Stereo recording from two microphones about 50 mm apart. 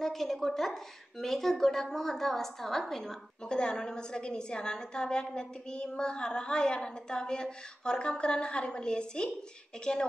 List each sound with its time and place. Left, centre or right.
0.0 s a woman's voice: centre